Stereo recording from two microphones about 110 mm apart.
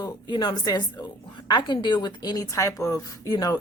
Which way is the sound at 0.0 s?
40° left (ahead or behind).